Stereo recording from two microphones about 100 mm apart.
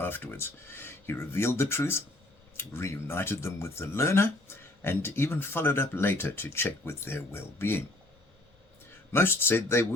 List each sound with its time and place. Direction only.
0.0 s speech: 20° left (ahead or behind)
9.1 s speech: 25° left (ahead or behind)